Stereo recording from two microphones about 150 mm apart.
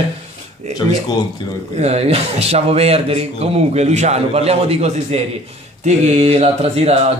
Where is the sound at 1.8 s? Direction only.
45° right (ahead or behind).